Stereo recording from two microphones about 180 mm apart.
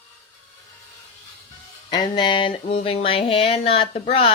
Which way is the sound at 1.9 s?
25° left (ahead or behind).